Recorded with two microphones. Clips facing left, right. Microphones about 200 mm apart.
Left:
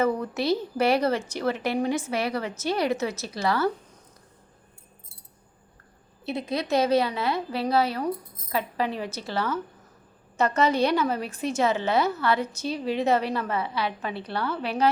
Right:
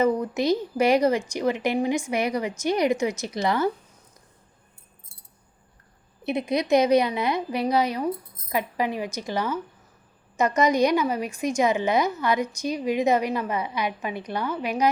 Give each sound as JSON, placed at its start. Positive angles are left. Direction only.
{"t": 0.0, "sound": "a woman's voice", "side_deg": -15}
{"t": 6.2, "sound": "a woman's voice", "side_deg": -15}